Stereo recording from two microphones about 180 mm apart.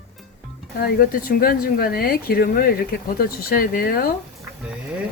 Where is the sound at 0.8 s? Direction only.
55° left (ahead or behind).